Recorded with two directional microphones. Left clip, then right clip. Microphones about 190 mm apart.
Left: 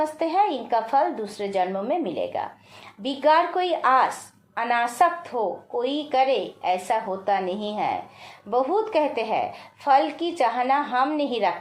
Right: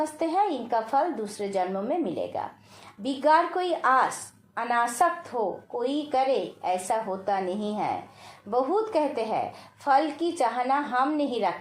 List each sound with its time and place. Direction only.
0.0 s a woman's voice: 20° left (ahead or behind)